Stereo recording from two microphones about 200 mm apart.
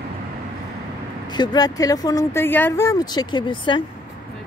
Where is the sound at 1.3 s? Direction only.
20° left (ahead or behind).